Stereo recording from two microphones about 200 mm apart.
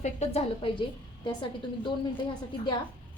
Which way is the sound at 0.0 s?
30° left (ahead or behind).